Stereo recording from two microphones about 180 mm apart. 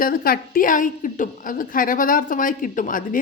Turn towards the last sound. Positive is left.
turn(degrees=50)  # may be behind; listen again after turning